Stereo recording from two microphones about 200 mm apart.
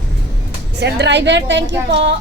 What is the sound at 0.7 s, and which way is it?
Speech, 55° right (ahead or behind).